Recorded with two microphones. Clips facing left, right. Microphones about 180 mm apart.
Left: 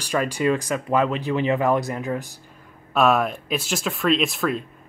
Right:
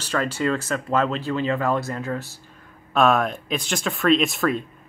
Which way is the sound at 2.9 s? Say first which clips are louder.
Even; 5° left (ahead or behind).